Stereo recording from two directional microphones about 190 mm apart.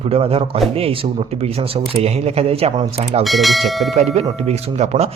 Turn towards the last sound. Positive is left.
turn(degrees=-35)  # may be behind; listen again after turning